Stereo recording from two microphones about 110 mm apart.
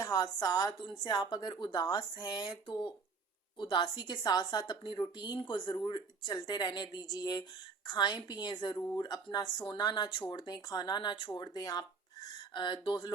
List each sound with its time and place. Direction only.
0.0 s a woman's voice: 35° left (ahead or behind)